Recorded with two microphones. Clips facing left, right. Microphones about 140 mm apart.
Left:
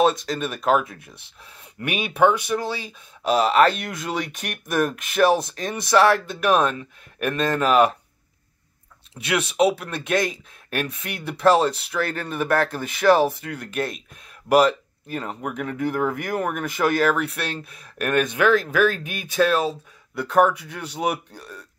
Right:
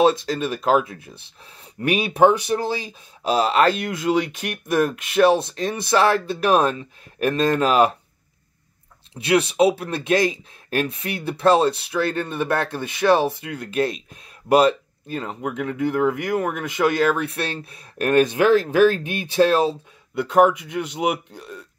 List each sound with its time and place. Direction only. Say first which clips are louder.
0.0 s speech: right 2 dB; 30° right (ahead or behind)
9.1 s speech: right 6 dB; 25° right (ahead or behind)